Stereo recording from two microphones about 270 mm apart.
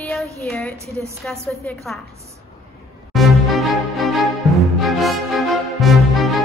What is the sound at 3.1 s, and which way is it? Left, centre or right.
Music, centre.